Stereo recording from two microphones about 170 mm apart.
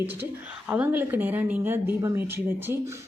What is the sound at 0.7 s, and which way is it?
Speech, 10° right (ahead or behind).